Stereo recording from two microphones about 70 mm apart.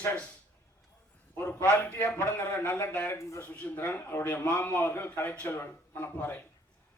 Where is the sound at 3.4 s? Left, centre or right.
Left.